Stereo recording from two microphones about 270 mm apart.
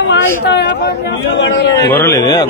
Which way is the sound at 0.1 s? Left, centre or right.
Left.